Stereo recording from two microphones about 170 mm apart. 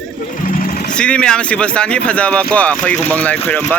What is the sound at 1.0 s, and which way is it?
Speech, 5° left (ahead or behind).